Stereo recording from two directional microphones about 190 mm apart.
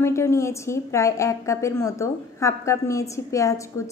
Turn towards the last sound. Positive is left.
turn(degrees=15)  # may be behind; listen again after turning